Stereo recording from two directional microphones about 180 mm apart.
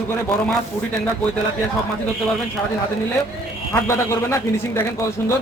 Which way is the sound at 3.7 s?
15° left (ahead or behind).